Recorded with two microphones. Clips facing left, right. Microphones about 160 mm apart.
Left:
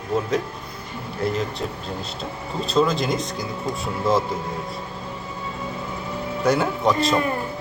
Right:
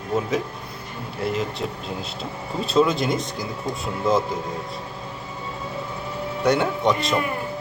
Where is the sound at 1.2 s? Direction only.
Centre (ahead or behind).